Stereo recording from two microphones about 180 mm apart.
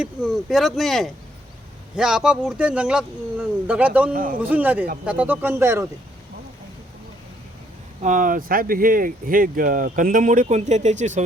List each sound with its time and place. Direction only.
0.0 s speech: centre (ahead or behind)
4.1 s speech: 50° right (ahead or behind)
4.4 s speech: 10° right (ahead or behind)
8.0 s speech: 45° right (ahead or behind)